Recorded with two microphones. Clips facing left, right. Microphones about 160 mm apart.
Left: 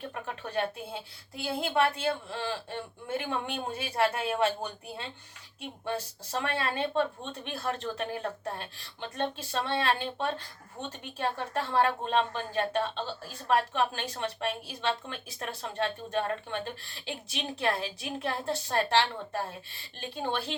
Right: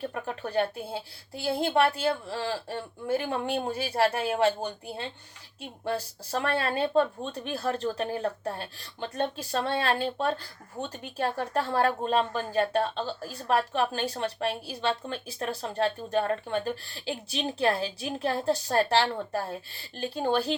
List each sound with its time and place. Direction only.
0.1 s a woman's voice: 35° right (ahead or behind)
6.4 s a woman's voice: 40° right (ahead or behind)